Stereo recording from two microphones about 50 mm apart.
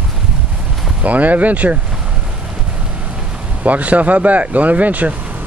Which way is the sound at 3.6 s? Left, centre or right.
Right.